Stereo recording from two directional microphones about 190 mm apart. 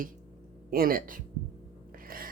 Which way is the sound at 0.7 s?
50° right (ahead or behind).